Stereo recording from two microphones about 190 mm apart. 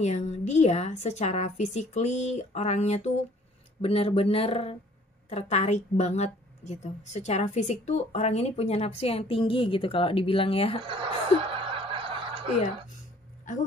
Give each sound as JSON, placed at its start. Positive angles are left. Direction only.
{"t": 0.0, "sound": "a woman's voice", "side_deg": 35}
{"t": 10.9, "sound": "snicker", "side_deg": -25}
{"t": 13.5, "sound": "a woman's voice", "side_deg": 40}